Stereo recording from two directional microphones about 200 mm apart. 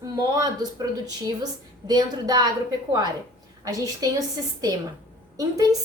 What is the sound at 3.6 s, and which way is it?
Speech, 15° right (ahead or behind).